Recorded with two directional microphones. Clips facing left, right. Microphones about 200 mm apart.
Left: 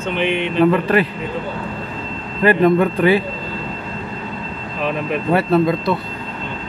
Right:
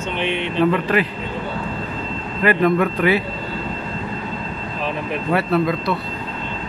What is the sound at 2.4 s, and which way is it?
Speech, 30° left (ahead or behind).